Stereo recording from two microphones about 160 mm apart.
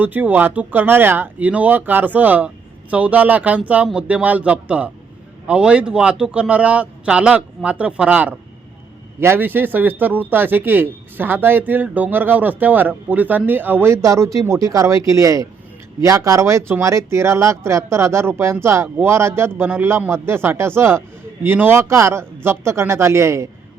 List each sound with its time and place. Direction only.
0.0 s speech: 10° right (ahead or behind)